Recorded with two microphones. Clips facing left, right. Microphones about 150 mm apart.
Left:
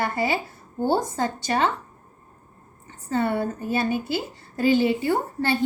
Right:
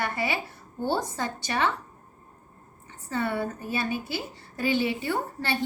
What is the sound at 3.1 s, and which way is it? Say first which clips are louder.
Speech: left 5 dB; 50° left (ahead or behind).